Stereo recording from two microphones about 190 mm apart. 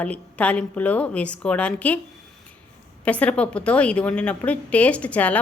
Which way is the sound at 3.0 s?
5° left (ahead or behind).